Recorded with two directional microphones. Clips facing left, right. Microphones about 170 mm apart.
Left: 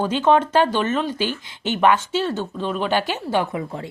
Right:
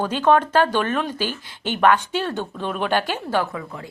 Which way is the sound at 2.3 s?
15° right (ahead or behind).